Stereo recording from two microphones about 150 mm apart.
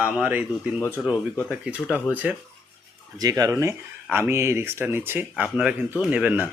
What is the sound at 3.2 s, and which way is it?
Speech, 25° right (ahead or behind).